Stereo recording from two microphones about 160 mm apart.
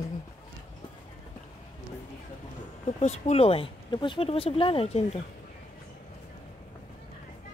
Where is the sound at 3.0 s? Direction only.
45° left (ahead or behind).